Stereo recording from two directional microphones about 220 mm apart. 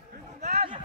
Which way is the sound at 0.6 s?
25° right (ahead or behind).